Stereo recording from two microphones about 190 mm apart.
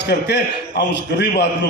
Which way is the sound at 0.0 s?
65° left (ahead or behind).